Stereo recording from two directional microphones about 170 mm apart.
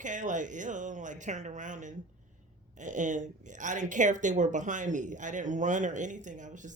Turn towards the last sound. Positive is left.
turn(degrees=-45)  # may be behind; listen again after turning